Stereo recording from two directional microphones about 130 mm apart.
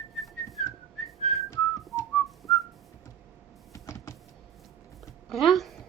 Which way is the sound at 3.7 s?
25° left (ahead or behind).